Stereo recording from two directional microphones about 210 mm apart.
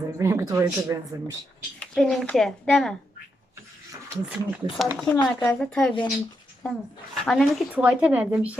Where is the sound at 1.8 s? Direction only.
5° left (ahead or behind).